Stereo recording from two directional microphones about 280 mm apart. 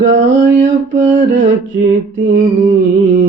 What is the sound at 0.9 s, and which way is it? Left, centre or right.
Mantra, right.